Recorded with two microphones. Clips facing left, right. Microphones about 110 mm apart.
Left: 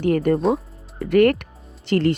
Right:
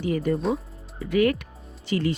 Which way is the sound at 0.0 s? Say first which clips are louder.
Left 6 dB; 65° left (ahead or behind).